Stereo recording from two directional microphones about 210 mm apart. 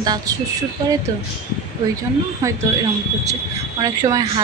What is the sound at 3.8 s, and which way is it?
Speech, 15° right (ahead or behind).